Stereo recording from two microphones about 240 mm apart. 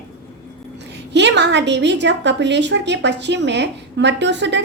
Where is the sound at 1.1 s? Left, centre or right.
Right.